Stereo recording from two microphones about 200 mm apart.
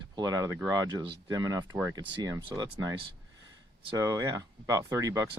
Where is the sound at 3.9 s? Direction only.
15° right (ahead or behind).